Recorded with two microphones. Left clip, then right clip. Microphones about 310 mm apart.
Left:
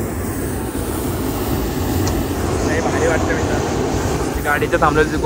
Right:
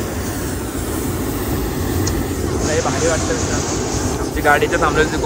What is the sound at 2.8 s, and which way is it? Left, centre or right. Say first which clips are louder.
Vehicle: even; centre.